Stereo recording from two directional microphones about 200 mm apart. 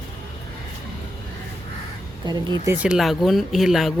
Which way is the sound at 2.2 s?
20° right (ahead or behind).